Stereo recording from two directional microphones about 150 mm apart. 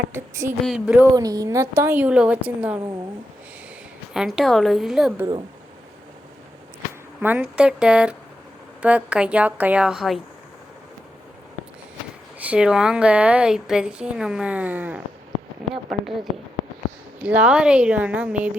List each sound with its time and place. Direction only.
0.1 s a woman's voice: 20° right (ahead or behind)
0.6 s a woman's voice: 5° right (ahead or behind)
1.1 s a woman's voice: 25° right (ahead or behind)
4.1 s a woman's voice: centre (ahead or behind)
7.2 s a woman's voice: 10° right (ahead or behind)
12.4 s a woman's voice: 5° right (ahead or behind)
17.2 s a woman's voice: 10° right (ahead or behind)